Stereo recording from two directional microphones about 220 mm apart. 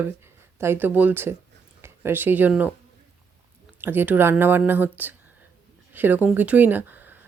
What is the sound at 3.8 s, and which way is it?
Speech, 10° right (ahead or behind).